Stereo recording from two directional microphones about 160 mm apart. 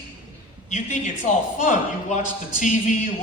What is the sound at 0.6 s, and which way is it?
A woman's voice, 50° left (ahead or behind).